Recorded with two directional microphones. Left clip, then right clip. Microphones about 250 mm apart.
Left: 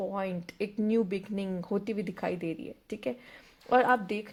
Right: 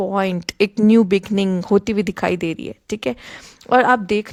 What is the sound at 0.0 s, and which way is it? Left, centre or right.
Speech, right.